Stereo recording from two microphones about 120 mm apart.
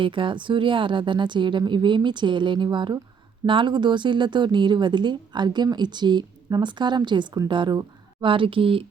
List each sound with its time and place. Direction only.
0.0 s speech: 45° right (ahead or behind)